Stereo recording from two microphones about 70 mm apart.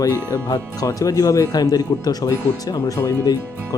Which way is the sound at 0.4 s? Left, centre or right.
Left.